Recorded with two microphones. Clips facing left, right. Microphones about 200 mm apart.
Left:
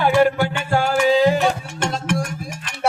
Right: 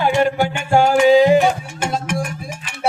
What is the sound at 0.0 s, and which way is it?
Music, 20° right (ahead or behind).